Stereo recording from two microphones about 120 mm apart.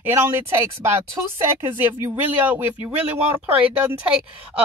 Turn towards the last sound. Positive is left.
turn(degrees=-15)  # may be behind; listen again after turning